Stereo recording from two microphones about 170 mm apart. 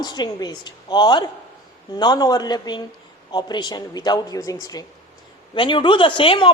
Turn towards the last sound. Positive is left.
turn(degrees=30)  # may be behind; listen again after turning